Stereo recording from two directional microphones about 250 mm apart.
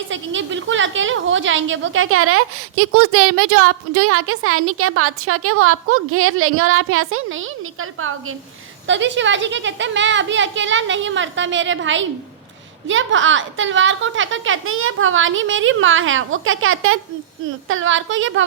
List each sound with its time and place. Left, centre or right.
0.1 s a woman's voice: right